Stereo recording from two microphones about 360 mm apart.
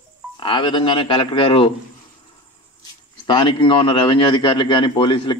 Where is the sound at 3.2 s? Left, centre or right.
Centre.